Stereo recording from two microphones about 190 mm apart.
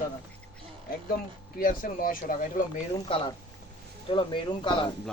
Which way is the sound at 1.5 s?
45° left (ahead or behind).